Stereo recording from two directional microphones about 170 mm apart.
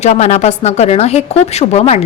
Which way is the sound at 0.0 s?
40° left (ahead or behind).